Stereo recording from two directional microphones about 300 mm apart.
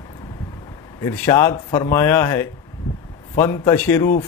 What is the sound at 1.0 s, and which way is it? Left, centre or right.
Speech, centre.